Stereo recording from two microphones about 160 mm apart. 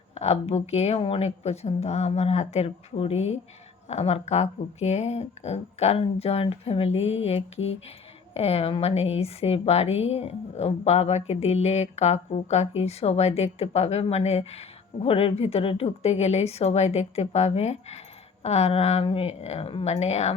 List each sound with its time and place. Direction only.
0.1 s a woman's voice: 40° left (ahead or behind)